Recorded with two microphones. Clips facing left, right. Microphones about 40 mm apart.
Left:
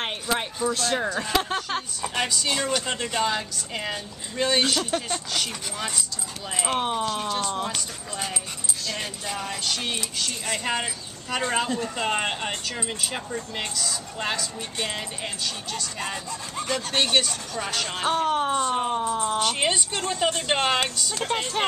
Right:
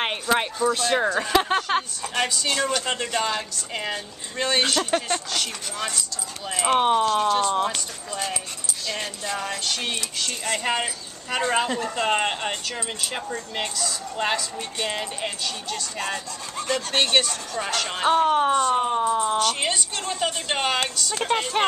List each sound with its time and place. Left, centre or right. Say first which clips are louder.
0.0 s a sound: right 4 dB; right
0.7 s speech: right 4 dB; centre
1.4 s speech: right 5 dB; right
2.0 s a woman's voice: right 1 dB; centre
6.6 s speech: right 6 dB; centre
7.1 s a woman's voice: right 6 dB; centre
16.0 s a woman's voice: right 2 dB; centre
17.8 s a woman's voice: right 5 dB; centre
19.4 s a woman's voice: even; centre
21.1 s speech: right 3 dB; centre